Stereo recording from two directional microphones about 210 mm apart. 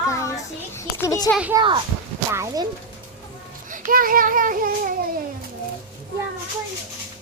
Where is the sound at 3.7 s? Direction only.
40° right (ahead or behind).